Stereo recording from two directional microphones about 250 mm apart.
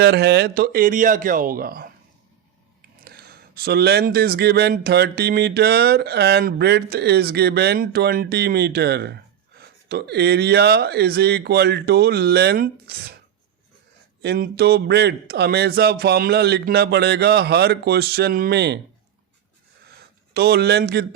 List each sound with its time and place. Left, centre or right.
0.0 s speech: right
3.0 s speech: right
14.2 s speech: right
20.3 s speech: right